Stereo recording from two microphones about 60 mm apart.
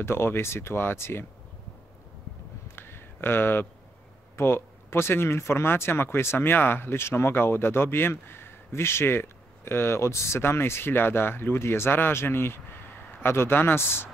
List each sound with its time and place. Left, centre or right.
0.0 s speech: left
2.7 s a sound: left
4.4 s speech: left